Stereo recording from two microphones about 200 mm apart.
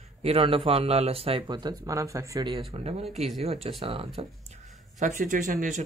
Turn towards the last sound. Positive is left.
turn(degrees=-40)  # may be behind; listen again after turning